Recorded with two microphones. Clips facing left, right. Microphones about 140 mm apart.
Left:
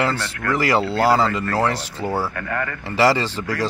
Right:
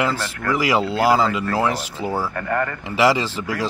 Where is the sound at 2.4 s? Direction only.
35° right (ahead or behind).